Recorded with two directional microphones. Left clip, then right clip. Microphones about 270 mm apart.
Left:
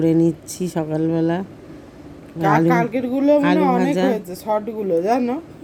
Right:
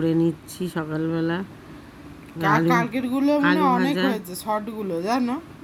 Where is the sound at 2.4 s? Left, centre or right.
Centre.